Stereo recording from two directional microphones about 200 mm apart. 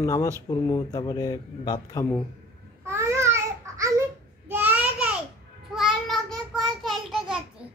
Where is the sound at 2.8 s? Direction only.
15° right (ahead or behind).